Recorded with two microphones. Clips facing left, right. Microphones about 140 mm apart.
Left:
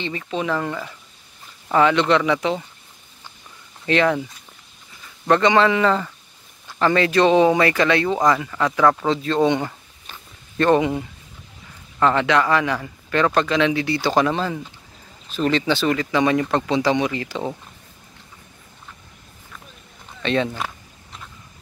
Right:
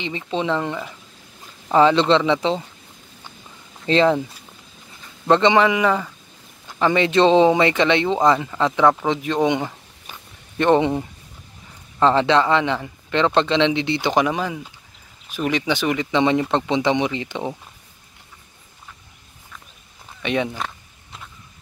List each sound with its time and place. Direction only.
0.0 s speech: 25° right (ahead or behind)
3.8 s speech: 30° right (ahead or behind)
5.3 s speech: 20° right (ahead or behind)
10.6 s speech: 25° right (ahead or behind)
20.2 s a sound: 15° right (ahead or behind)
20.5 s a sound: 5° left (ahead or behind)